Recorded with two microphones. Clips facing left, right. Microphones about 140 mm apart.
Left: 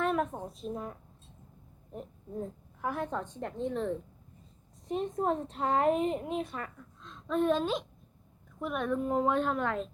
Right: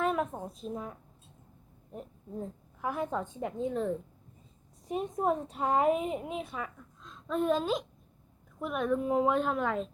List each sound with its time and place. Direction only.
0.0 s a woman's voice: centre (ahead or behind)